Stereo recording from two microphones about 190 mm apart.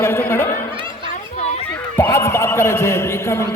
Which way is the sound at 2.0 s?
15° left (ahead or behind).